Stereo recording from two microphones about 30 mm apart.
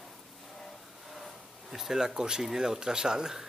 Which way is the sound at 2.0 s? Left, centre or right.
Right.